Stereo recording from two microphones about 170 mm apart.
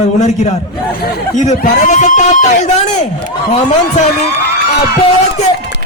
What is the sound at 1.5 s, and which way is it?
Speech, 45° left (ahead or behind).